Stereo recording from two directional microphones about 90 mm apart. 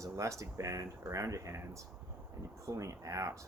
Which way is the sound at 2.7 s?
40° right (ahead or behind).